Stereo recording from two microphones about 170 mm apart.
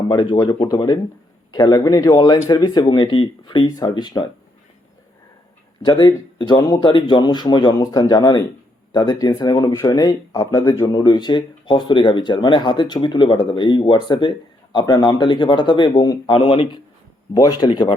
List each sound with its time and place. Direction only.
0.1 s speech: 25° left (ahead or behind)
5.8 s speech: 25° left (ahead or behind)